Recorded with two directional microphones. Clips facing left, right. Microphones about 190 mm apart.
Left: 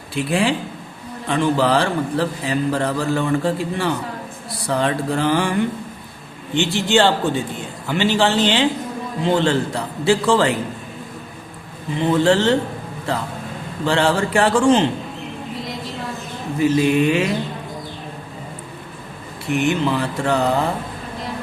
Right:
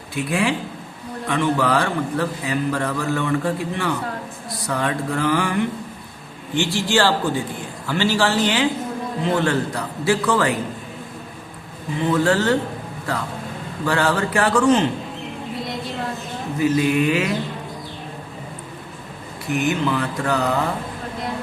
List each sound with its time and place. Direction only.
0.1 s a man's voice: 30° left (ahead or behind)
11.9 s a man's voice: 25° left (ahead or behind)
13.8 s a man's voice: 25° left (ahead or behind)
16.6 s a man's voice: 25° left (ahead or behind)
19.5 s a man's voice: 30° left (ahead or behind)